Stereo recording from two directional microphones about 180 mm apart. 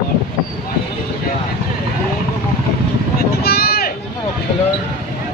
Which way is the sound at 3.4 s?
60° left (ahead or behind).